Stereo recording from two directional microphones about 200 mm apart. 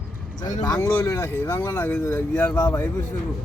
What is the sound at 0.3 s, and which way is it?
Speech, 40° left (ahead or behind).